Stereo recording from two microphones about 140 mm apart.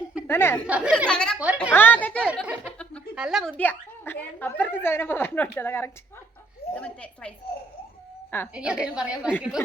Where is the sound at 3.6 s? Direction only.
15° left (ahead or behind).